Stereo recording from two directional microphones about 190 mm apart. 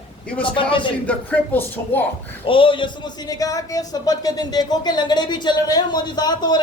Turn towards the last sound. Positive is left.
turn(degrees=20)  # may be behind; listen again after turning